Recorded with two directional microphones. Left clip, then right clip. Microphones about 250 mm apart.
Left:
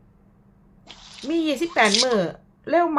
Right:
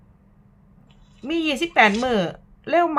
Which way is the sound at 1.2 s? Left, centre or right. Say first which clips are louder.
Even; centre.